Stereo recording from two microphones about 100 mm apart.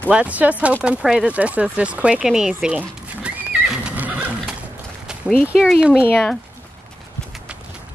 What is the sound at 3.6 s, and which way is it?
Neigh, 5° right (ahead or behind).